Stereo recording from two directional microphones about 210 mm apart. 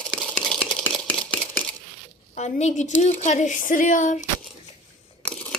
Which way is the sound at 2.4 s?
35° left (ahead or behind).